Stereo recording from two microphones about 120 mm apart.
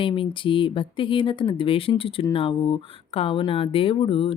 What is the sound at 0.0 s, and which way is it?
Speech, 45° left (ahead or behind).